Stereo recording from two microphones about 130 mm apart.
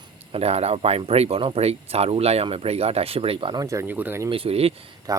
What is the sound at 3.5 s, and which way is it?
Speech, 25° right (ahead or behind).